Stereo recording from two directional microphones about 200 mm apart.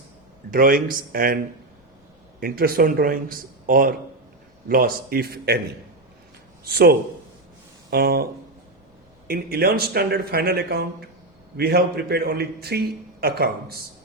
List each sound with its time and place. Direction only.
0.5 s a man's voice: 45° right (ahead or behind)
2.4 s a man's voice: 50° right (ahead or behind)
7.9 s a man's voice: 50° right (ahead or behind)